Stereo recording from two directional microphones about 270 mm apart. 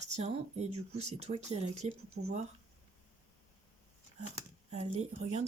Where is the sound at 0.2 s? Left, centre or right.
Right.